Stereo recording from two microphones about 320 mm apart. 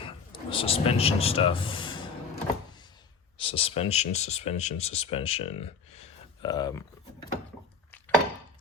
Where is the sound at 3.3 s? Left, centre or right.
Centre.